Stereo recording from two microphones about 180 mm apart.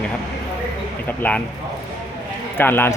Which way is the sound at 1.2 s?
10° left (ahead or behind).